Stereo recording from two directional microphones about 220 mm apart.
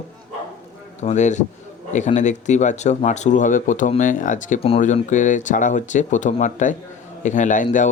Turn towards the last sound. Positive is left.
turn(degrees=35)  # may be behind; listen again after turning